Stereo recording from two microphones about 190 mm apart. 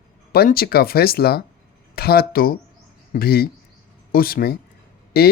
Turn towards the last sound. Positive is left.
turn(degrees=55)  # may be behind; listen again after turning